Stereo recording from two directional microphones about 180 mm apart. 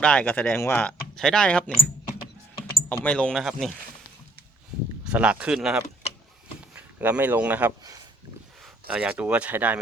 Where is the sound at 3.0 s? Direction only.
5° left (ahead or behind).